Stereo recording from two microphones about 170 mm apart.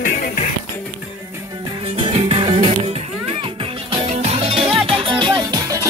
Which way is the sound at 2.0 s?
35° right (ahead or behind).